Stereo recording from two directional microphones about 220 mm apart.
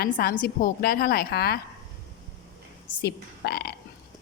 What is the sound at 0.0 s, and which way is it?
A woman's voice, 45° left (ahead or behind).